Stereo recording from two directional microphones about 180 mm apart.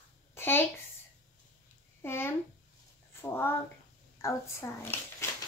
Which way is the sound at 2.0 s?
15° left (ahead or behind).